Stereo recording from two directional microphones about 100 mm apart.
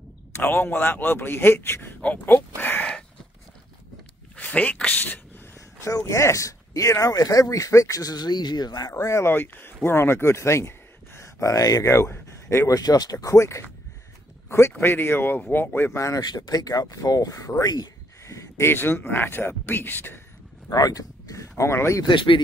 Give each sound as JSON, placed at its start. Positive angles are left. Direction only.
{"t": 0.3, "sound": "speech", "side_deg": 20}
{"t": 4.4, "sound": "speech", "side_deg": 15}
{"t": 5.9, "sound": "speech", "side_deg": 30}
{"t": 8.9, "sound": "speech", "side_deg": 30}
{"t": 14.8, "sound": "speech", "side_deg": 25}
{"t": 20.7, "sound": "speech", "side_deg": 40}
{"t": 22.0, "sound": "speech", "side_deg": 55}